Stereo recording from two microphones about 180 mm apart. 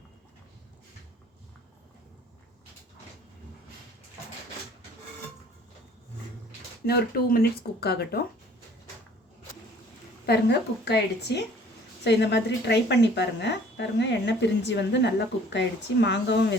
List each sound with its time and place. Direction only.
6.8 s speech: 60° left (ahead or behind)
10.2 s a woman's voice: 70° left (ahead or behind)